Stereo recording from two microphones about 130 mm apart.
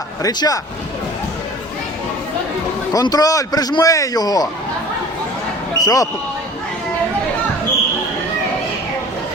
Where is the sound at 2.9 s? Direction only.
30° left (ahead or behind).